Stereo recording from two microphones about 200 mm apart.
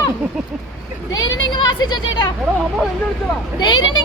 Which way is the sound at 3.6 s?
20° left (ahead or behind).